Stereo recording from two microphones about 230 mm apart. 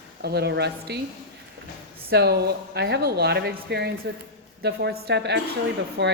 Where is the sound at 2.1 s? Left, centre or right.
Right.